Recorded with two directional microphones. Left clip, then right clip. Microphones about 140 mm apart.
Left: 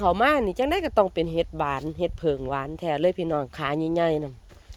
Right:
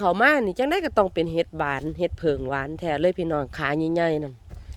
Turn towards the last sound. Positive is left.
turn(degrees=-25)  # may be behind; listen again after turning